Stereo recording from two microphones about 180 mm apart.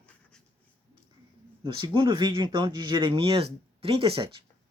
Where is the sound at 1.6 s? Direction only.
30° right (ahead or behind).